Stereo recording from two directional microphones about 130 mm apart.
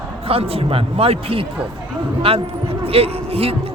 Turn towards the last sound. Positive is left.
turn(degrees=-50)  # may be behind; listen again after turning